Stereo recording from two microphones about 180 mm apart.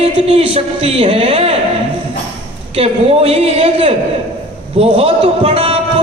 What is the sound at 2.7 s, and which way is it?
A man's voice, 35° right (ahead or behind).